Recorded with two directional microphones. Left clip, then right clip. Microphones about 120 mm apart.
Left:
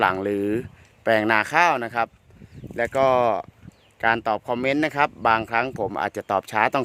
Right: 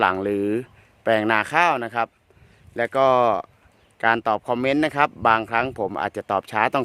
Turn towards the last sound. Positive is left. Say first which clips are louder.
# even
turn(degrees=-15)  # may be behind; listen again after turning